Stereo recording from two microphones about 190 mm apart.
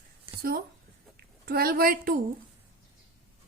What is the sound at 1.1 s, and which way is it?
A woman's voice, 50° right (ahead or behind).